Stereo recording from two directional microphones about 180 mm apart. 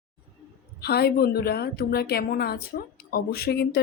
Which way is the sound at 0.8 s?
60° left (ahead or behind).